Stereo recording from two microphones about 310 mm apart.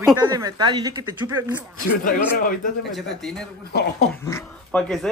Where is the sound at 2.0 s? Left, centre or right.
Left.